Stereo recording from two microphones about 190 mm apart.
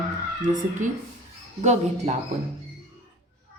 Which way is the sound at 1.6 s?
40° right (ahead or behind).